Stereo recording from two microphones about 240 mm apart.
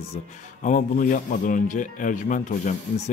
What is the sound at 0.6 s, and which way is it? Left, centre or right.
Speech, left.